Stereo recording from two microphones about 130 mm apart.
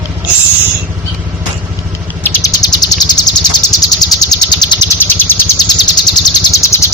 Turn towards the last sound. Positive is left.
turn(degrees=25)  # may be behind; listen again after turning